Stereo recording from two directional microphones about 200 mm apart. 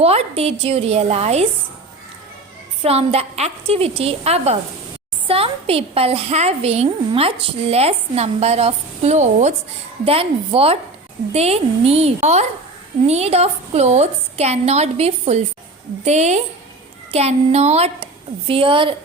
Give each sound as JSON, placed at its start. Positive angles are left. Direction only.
{"t": 0.0, "sound": "a woman's voice", "side_deg": -30}
{"t": 2.8, "sound": "a woman's voice", "side_deg": -30}